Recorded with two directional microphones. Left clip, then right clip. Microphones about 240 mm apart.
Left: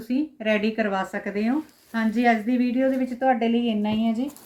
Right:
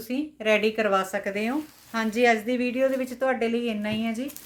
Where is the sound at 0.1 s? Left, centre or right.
Right.